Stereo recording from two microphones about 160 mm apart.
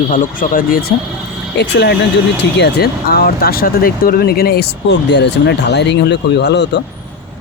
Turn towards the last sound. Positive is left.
turn(degrees=90)